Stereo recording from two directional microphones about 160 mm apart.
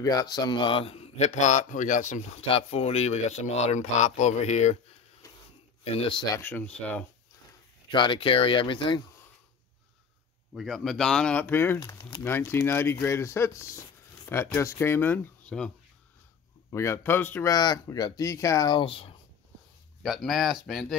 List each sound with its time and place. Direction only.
0.0 s a man's voice: 20° left (ahead or behind); by 2.4 s 50° left (ahead or behind)
2.4 s speech: 35° left (ahead or behind)
5.2 s a sound: 20° left (ahead or behind)
5.9 s a man's voice: 30° left (ahead or behind)
6.3 s speech: 10° left (ahead or behind)
7.9 s a man's voice: 30° left (ahead or behind)
10.5 s speech: centre (ahead or behind)
16.7 s speech: 15° left (ahead or behind); by 19.1 s 35° left (ahead or behind)
20.0 s speech: centre (ahead or behind)